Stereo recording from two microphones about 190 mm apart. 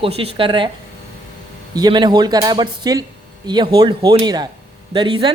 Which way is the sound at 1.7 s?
20° right (ahead or behind).